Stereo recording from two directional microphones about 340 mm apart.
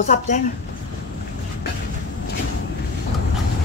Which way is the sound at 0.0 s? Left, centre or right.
Left.